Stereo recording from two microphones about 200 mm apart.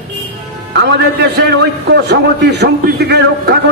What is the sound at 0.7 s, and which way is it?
A man's voice, 55° right (ahead or behind).